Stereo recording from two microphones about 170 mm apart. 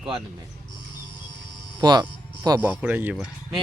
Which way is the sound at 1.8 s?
25° right (ahead or behind).